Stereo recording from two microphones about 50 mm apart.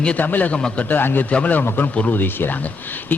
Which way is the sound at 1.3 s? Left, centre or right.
Left.